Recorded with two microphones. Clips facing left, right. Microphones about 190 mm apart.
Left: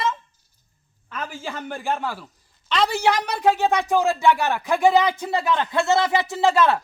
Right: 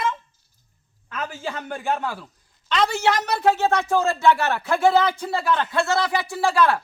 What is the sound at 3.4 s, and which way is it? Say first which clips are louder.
Speech: left 1 dB; 15° left (ahead or behind).